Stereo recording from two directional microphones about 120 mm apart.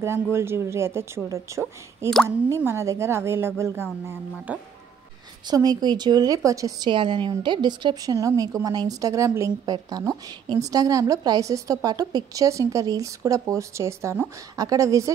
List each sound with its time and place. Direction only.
0.0 s speech: 20° right (ahead or behind)
5.5 s a woman's voice: 35° right (ahead or behind)